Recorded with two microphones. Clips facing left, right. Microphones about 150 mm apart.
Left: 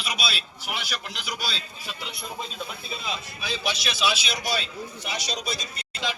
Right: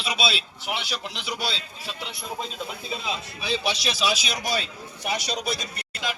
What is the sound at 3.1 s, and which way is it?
A man's voice, 30° right (ahead or behind).